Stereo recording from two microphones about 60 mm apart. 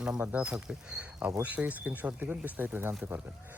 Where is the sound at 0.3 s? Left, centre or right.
Right.